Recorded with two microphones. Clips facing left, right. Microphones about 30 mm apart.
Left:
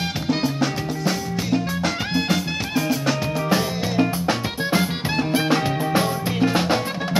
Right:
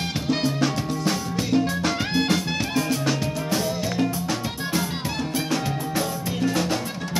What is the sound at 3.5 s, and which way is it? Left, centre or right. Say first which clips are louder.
Music: left 3 dB; left.